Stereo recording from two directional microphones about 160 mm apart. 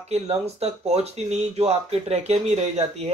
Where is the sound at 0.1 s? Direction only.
40° right (ahead or behind).